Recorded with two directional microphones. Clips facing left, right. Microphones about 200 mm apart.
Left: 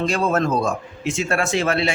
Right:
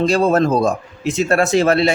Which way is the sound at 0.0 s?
35° right (ahead or behind).